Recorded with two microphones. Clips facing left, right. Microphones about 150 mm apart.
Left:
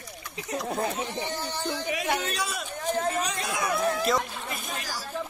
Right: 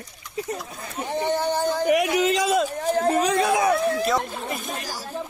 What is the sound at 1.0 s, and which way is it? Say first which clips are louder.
Speech: right 9 dB; 55° right (ahead or behind).